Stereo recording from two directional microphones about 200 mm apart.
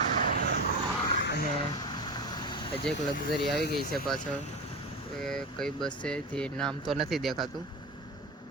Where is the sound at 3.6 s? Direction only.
50° left (ahead or behind).